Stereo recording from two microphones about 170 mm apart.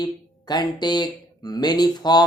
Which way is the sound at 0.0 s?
25° left (ahead or behind).